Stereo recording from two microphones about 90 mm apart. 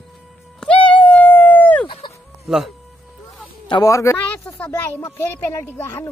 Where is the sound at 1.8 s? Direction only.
65° left (ahead or behind).